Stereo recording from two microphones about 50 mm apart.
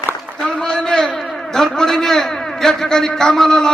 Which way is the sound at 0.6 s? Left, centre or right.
Centre.